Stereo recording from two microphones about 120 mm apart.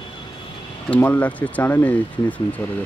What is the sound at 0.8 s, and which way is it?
Speech, 15° left (ahead or behind).